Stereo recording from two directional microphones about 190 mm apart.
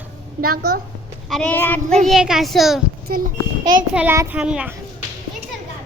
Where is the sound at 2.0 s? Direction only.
Centre (ahead or behind).